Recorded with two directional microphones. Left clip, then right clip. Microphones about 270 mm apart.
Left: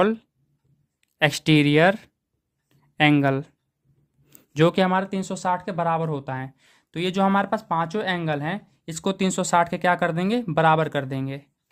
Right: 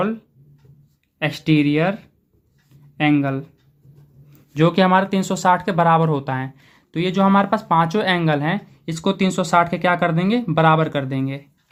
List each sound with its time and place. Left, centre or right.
1.2 s speech: left